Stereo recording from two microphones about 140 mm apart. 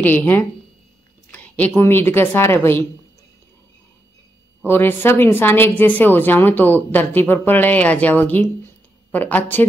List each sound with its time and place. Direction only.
0.0 s a woman's voice: 15° left (ahead or behind)
4.6 s a woman's voice: 15° left (ahead or behind)